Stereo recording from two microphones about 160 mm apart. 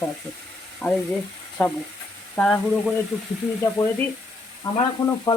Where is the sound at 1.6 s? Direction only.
5° left (ahead or behind).